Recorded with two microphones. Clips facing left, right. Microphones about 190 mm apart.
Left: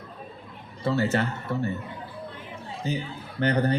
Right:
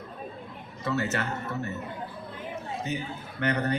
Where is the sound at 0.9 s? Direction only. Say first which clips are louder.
Left 4 dB; 30° left (ahead or behind).